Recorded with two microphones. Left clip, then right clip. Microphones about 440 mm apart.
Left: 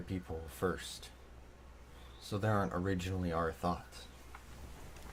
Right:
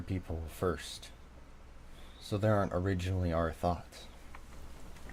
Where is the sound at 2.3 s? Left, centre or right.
Right.